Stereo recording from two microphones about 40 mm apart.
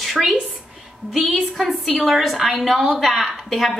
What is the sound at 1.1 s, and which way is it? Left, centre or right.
A woman's voice, centre.